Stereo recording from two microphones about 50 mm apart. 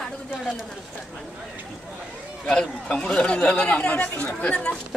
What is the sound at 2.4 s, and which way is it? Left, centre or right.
Speech, centre.